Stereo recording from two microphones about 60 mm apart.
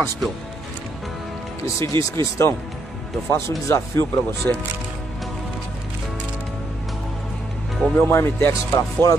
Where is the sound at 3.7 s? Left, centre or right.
Left.